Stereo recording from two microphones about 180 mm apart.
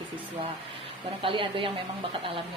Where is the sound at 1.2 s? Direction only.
30° right (ahead or behind).